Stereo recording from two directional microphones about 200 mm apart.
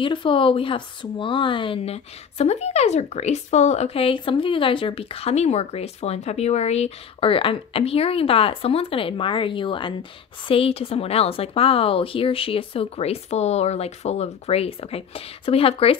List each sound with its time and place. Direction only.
0.0 s speech: 25° left (ahead or behind)